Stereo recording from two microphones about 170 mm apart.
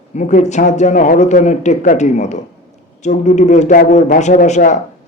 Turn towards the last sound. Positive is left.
turn(degrees=45)  # may be behind; listen again after turning